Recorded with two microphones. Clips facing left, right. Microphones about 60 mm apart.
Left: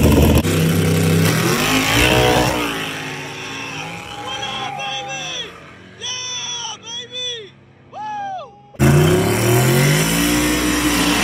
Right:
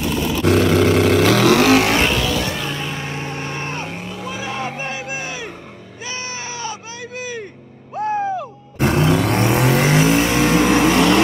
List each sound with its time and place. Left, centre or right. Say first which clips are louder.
0.0 s vehicle: left 7 dB; centre
0.5 s vehicle: right 4 dB; right
1.9 s vehicle: left 1 dB; centre
2.2 s vehicle: left 6 dB; left
3.0 s vehicle: right 1 dB; right
3.3 s music: right 3 dB; right
4.3 s a sound: even; right
8.7 s vehicle: left 3 dB; centre
10.2 s vehicle: right 2 dB; right